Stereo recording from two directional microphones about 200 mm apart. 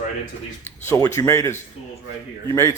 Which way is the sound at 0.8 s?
15° left (ahead or behind).